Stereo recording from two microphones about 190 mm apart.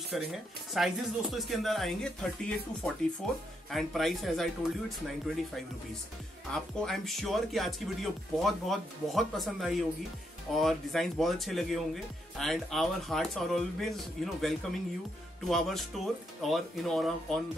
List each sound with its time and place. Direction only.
0.1 s speech: centre (ahead or behind)
6.5 s speech: centre (ahead or behind)